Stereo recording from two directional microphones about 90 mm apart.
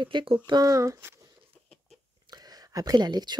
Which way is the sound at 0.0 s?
70° right (ahead or behind).